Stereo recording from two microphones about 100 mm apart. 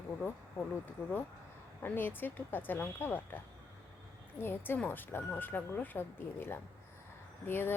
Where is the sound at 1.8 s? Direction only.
20° left (ahead or behind).